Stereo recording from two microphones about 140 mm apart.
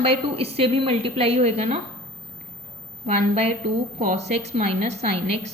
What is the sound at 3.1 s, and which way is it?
A woman's voice, 50° right (ahead or behind).